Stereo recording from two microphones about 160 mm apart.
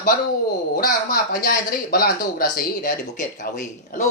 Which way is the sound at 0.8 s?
60° left (ahead or behind).